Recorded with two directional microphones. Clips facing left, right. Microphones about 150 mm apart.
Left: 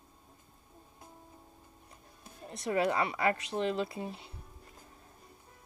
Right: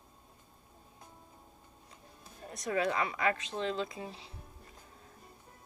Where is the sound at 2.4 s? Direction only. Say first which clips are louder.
Left 2 dB; 30° left (ahead or behind).